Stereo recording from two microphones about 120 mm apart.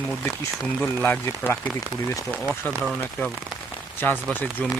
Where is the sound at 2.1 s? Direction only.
20° left (ahead or behind).